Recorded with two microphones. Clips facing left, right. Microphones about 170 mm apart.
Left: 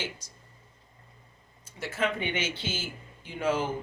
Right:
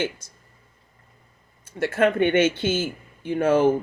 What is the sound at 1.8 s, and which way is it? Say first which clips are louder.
Speech: right 11 dB; 60° right (ahead or behind).